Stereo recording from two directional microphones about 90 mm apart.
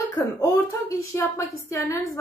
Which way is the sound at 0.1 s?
35° left (ahead or behind).